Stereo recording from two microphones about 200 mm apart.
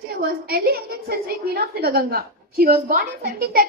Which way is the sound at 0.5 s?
50° right (ahead or behind).